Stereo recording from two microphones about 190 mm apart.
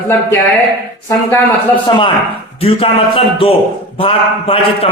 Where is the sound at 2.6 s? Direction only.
30° left (ahead or behind).